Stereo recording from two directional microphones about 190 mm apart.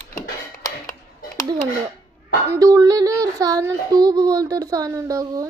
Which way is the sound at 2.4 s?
15° right (ahead or behind).